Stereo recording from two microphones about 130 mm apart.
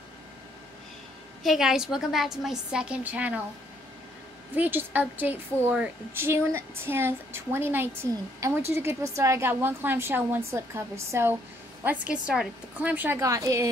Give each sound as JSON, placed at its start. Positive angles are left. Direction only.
{"t": 1.4, "sound": "a woman's voice", "side_deg": -5}
{"t": 4.6, "sound": "a woman's voice", "side_deg": -15}
{"t": 13.2, "sound": "a woman's voice", "side_deg": -25}